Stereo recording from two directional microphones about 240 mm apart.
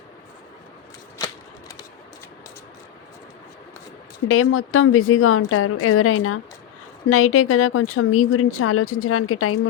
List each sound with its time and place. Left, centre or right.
4.3 s speech: left